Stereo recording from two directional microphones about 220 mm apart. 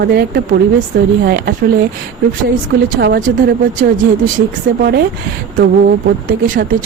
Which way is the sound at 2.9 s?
45° right (ahead or behind).